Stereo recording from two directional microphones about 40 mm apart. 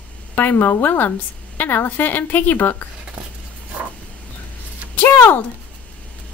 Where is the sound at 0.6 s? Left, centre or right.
Left.